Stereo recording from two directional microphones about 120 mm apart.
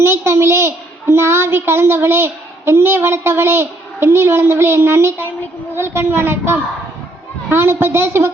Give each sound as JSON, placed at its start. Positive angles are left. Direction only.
{"t": 0.0, "sound": "a child's voice", "side_deg": -20}